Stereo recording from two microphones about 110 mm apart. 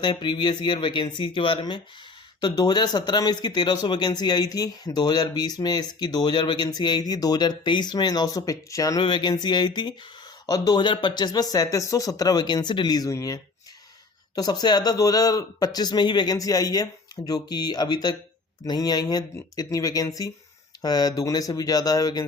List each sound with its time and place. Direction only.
0.0 s speech: 45° left (ahead or behind)
9.0 s speech: 45° left (ahead or behind)